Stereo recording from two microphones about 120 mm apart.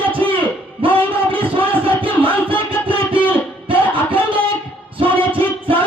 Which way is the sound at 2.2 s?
50° right (ahead or behind).